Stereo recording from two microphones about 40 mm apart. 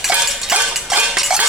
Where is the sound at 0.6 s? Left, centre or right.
Right.